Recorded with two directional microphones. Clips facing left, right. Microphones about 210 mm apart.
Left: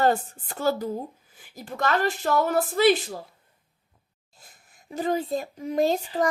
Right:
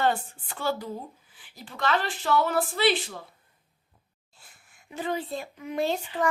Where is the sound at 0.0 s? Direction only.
40° left (ahead or behind).